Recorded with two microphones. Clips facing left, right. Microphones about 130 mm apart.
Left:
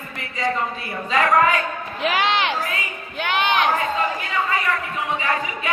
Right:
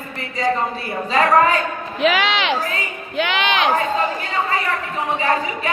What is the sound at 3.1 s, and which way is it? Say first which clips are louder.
Speech: right 1 dB; 90° right.